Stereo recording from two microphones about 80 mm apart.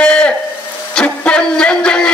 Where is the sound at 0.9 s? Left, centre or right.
Centre.